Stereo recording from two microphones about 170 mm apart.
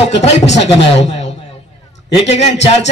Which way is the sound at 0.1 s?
40° left (ahead or behind).